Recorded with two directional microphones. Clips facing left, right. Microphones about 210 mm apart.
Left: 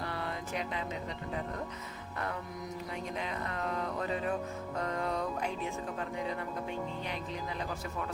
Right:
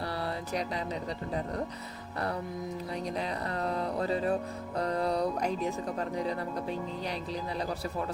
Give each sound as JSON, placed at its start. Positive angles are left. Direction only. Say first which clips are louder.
{"t": 3.2, "sound": "music", "louder": "right 3 dB", "side_deg": -35}